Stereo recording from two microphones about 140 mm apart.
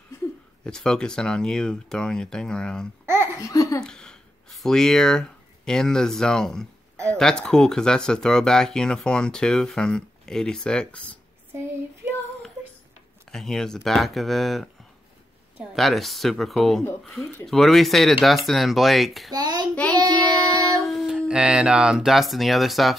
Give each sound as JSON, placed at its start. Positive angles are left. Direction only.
{"t": 0.7, "sound": "speech", "side_deg": 5}
{"t": 3.3, "sound": "laughter", "side_deg": 20}
{"t": 3.8, "sound": "speech", "side_deg": 5}
{"t": 11.5, "sound": "child singing", "side_deg": -15}
{"t": 13.3, "sound": "speech", "side_deg": 5}
{"t": 19.3, "sound": "child singing", "side_deg": -30}
{"t": 19.7, "sound": "child singing", "side_deg": 10}
{"t": 20.0, "sound": "child singing", "side_deg": -30}
{"t": 20.8, "sound": "speech", "side_deg": 0}